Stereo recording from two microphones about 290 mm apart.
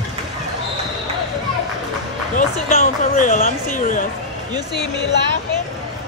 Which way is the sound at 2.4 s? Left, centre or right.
Left.